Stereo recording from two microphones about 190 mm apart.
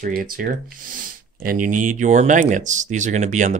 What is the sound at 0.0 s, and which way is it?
Speech, 50° right (ahead or behind).